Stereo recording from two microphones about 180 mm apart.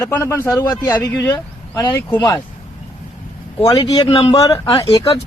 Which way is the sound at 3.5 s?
25° left (ahead or behind).